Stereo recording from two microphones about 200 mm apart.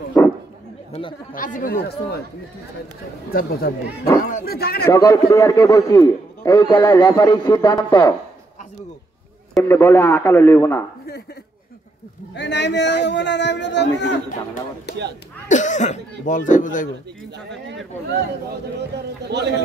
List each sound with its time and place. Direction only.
0.2 s a sound: 15° left (ahead or behind)
1.3 s speech: 40° left (ahead or behind)
3.3 s speech: 50° left (ahead or behind)
4.9 s a man's voice: 15° left (ahead or behind)
9.6 s a man's voice: 10° left (ahead or behind)
12.4 s a man's voice: 60° left (ahead or behind)
15.4 s speech: 40° left (ahead or behind)
18.8 s a man's voice: 55° right (ahead or behind)